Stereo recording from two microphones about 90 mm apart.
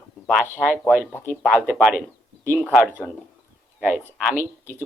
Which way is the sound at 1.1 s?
20° left (ahead or behind).